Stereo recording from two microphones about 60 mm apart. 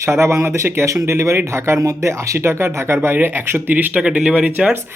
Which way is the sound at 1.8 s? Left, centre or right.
Right.